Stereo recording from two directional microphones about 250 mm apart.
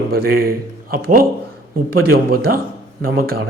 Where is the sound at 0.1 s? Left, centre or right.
Right.